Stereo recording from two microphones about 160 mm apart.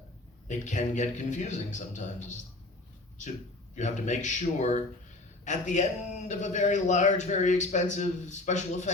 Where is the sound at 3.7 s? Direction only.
50° left (ahead or behind).